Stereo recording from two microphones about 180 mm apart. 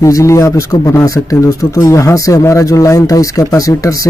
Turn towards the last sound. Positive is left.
turn(degrees=20)  # may be behind; listen again after turning